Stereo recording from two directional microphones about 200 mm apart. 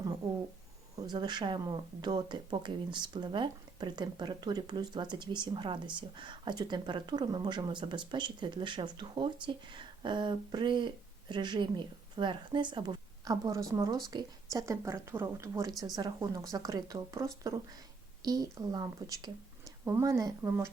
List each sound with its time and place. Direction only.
1.1 s speech: 20° right (ahead or behind)